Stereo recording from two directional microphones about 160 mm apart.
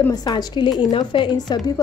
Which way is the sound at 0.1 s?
25° left (ahead or behind).